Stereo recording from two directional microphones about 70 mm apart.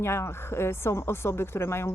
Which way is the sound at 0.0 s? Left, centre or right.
Left.